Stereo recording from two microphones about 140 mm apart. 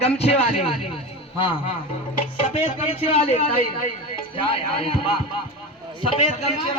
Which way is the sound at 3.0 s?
45° left (ahead or behind).